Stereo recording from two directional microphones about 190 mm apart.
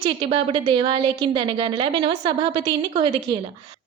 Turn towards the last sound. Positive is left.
turn(degrees=-25)  # may be behind; listen again after turning